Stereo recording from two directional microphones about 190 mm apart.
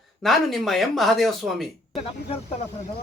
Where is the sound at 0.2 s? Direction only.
Centre (ahead or behind).